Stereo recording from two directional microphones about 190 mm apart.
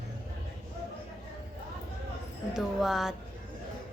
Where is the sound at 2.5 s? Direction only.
Centre (ahead or behind).